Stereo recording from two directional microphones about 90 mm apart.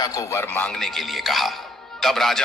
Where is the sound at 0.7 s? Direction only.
Centre (ahead or behind).